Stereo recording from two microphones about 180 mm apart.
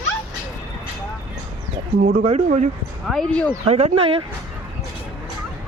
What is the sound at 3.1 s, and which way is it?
Speech, 5° left (ahead or behind).